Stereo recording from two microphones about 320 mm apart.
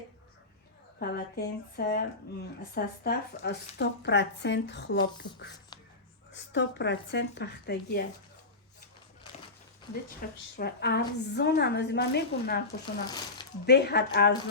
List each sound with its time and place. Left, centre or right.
0.9 s a woman's voice: left
5.7 s a sound: centre
6.3 s a woman's voice: left
10.2 s a woman's voice: left
12.6 s speech: centre
13.7 s a woman's voice: left